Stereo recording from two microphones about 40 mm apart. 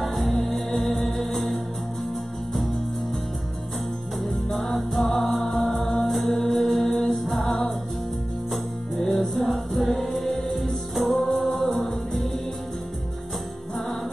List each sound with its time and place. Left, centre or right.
0.0 s music: centre
4.2 s music: centre